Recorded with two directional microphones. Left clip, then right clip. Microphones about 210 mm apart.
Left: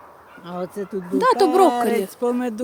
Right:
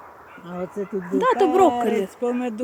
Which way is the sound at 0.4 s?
5° left (ahead or behind).